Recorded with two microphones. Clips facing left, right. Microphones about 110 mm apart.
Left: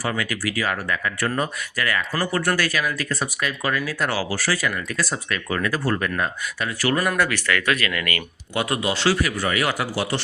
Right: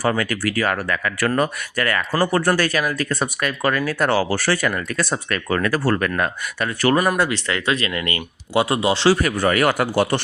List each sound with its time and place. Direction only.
0.0 s speech: 45° right (ahead or behind)
1.0 s speech: 75° right (ahead or behind)
1.7 s speech: 50° right (ahead or behind)
7.2 s speech: 25° right (ahead or behind)
9.0 s speech: 45° right (ahead or behind)